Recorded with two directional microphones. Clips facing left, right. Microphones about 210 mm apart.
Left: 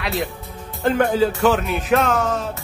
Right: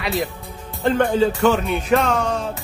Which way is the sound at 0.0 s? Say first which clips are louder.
Right 1 dB; centre (ahead or behind).